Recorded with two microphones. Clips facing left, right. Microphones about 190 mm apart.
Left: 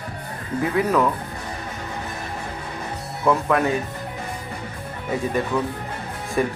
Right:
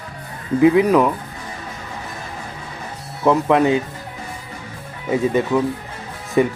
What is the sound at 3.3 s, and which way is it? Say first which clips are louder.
Speech: right 5 dB; 20° right (ahead or behind).